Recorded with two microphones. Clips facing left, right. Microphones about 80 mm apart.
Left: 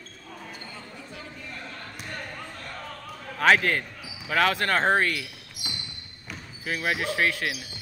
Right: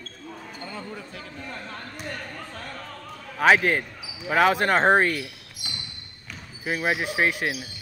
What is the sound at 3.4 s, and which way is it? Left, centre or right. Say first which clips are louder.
Speech: right 2 dB; centre.